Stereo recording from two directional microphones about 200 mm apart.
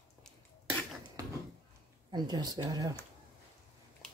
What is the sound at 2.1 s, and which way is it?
Speech, 20° right (ahead or behind).